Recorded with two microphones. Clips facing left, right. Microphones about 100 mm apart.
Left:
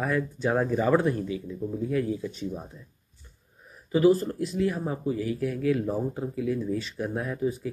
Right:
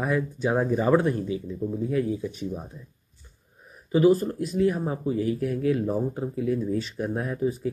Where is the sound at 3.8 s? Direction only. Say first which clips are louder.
Right 1 dB; 25° right (ahead or behind).